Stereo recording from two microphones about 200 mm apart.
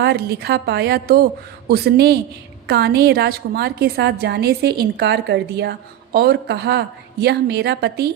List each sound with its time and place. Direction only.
0.0 s a woman's voice: 55° right (ahead or behind)